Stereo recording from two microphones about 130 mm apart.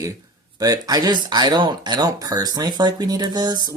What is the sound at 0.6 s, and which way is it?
Speech, 30° right (ahead or behind).